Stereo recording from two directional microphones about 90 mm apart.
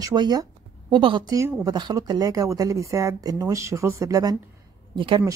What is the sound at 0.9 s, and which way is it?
Speech, 60° right (ahead or behind).